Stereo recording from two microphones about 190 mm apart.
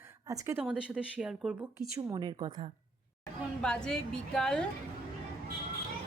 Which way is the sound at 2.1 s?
25° right (ahead or behind).